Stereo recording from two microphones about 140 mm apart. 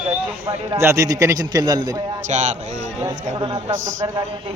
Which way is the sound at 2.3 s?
55° right (ahead or behind).